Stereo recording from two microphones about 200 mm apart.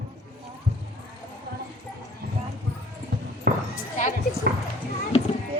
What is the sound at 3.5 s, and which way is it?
Basketball bounce, 50° right (ahead or behind).